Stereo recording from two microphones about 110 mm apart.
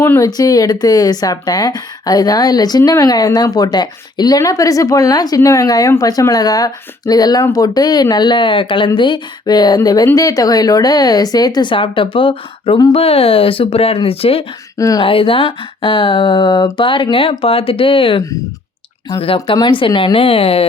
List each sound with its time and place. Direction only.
0.0 s speech: 25° left (ahead or behind); by 14.4 s 60° left (ahead or behind)
14.8 s speech: 30° left (ahead or behind)
15.0 s speech: 55° left (ahead or behind)
19.2 s speech: 55° left (ahead or behind)
20.1 s speech: 60° left (ahead or behind)